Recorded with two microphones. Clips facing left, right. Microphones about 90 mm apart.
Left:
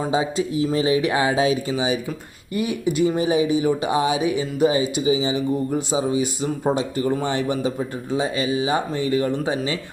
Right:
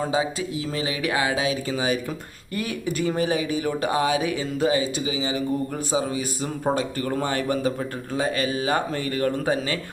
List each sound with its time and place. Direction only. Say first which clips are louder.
0.1 s speech: left 3 dB; 25° left (ahead or behind)
2.6 s speech: left 6 dB; 20° left (ahead or behind)